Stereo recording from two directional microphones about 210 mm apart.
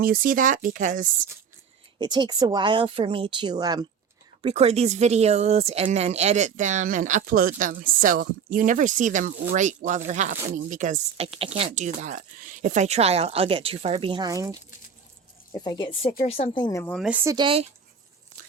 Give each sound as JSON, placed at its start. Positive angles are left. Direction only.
{"t": 0.0, "sound": "speech", "side_deg": -40}
{"t": 2.0, "sound": "speech", "side_deg": -20}
{"t": 4.4, "sound": "speech", "side_deg": -30}
{"t": 15.5, "sound": "speech", "side_deg": 20}
{"t": 16.8, "sound": "speech", "side_deg": 5}
{"t": 17.1, "sound": "speech", "side_deg": -10}
{"t": 17.3, "sound": "speech", "side_deg": -25}